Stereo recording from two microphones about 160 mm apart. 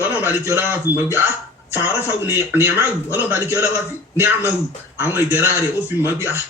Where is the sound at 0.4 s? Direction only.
15° right (ahead or behind).